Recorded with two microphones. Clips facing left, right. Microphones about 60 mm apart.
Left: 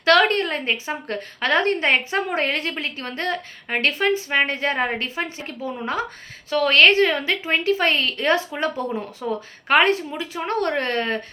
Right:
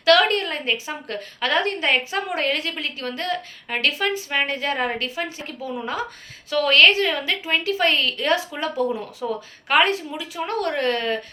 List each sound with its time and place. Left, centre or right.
0.0 s a woman's voice: left